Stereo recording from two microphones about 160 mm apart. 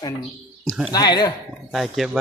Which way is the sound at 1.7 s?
Centre (ahead or behind).